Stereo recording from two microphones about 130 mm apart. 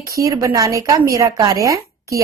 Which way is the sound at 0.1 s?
25° right (ahead or behind).